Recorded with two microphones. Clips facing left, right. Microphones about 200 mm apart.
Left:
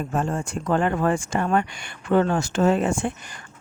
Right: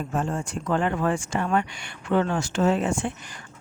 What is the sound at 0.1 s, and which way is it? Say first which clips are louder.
Speech: left 1 dB; 50° left (ahead or behind).